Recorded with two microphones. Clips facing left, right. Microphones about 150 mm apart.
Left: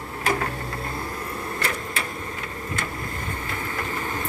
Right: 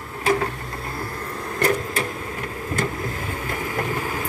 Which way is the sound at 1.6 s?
40° right (ahead or behind).